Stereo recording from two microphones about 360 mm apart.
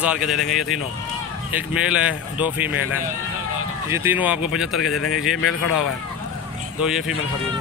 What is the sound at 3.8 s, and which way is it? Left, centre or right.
Speech, centre.